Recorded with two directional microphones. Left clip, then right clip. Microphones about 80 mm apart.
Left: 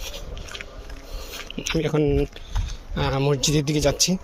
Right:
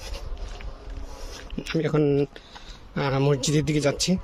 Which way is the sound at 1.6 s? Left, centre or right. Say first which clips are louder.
Left 2 dB; right.